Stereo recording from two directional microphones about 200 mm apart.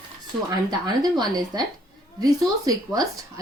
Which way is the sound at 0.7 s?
20° right (ahead or behind).